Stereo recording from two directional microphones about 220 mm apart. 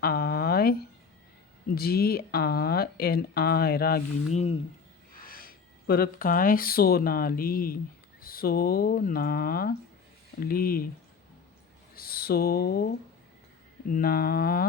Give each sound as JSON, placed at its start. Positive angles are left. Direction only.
{"t": 0.0, "sound": "a sound", "side_deg": 45}
{"t": 1.7, "sound": "speech", "side_deg": 45}
{"t": 4.3, "sound": "speech", "side_deg": 30}
{"t": 5.1, "sound": "speech", "side_deg": 40}
{"t": 11.9, "sound": "speech", "side_deg": 45}
{"t": 13.9, "sound": "speech", "side_deg": 40}